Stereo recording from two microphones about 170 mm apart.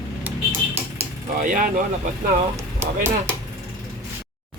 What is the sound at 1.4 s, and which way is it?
Speech, 50° right (ahead or behind).